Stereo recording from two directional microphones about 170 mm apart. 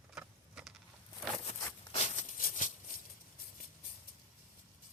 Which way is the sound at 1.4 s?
40° left (ahead or behind).